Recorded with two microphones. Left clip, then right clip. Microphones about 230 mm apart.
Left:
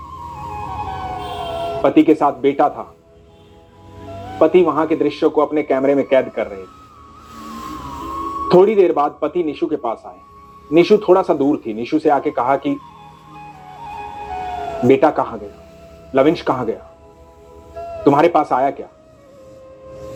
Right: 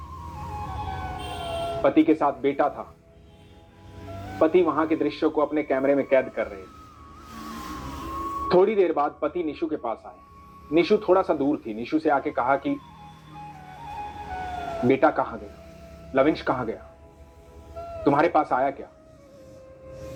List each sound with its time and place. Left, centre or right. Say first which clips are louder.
0.7 s emergency vehicle: left 10 dB; left
1.7 s a man's voice: left 7 dB; left
4.4 s a man's voice: left 7 dB; left
8.4 s a man's voice: left 8 dB; left
14.8 s a man's voice: left 7 dB; left